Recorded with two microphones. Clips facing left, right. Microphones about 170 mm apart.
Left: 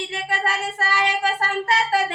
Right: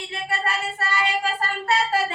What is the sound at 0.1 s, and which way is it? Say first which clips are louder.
Child singing: right 1 dB; 90° left.